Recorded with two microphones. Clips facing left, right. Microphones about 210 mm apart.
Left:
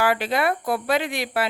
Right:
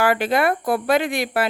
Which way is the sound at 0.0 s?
50° right (ahead or behind).